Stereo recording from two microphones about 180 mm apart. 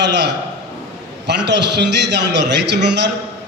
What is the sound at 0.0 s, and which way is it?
Speech, 70° right (ahead or behind).